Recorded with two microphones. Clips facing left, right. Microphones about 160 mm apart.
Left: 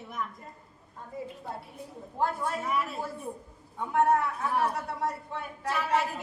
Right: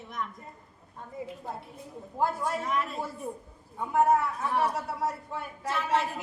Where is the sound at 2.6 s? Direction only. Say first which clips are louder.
Even; 5° left (ahead or behind).